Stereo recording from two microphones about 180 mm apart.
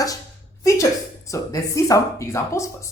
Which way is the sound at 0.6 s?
20° left (ahead or behind).